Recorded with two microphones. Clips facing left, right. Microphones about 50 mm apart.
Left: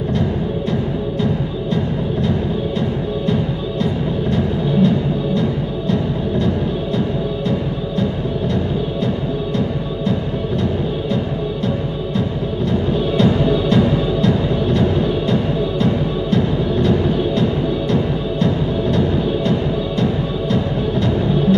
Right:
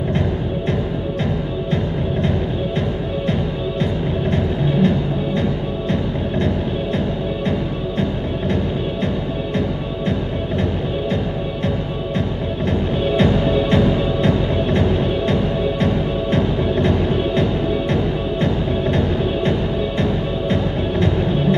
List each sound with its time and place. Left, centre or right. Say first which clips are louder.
13.1 s music: left 1 dB; right
18.4 s music: left 2 dB; right